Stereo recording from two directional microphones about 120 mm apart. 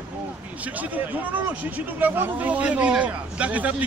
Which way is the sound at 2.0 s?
15° right (ahead or behind).